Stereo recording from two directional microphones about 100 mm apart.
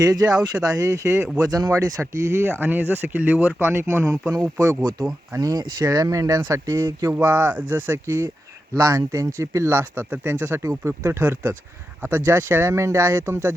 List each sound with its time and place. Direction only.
0.0 s speech: 35° right (ahead or behind)
7.1 s speech: 20° right (ahead or behind)
8.7 s speech: 35° right (ahead or behind)